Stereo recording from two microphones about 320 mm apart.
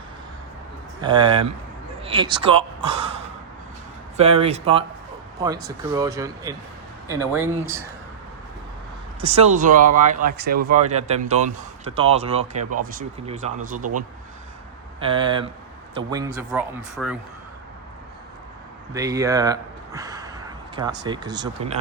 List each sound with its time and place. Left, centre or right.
1.0 s speech: centre
4.2 s speech: centre
9.2 s speech: right
15.0 s speech: centre
18.9 s a sound: centre
21.0 s speech: centre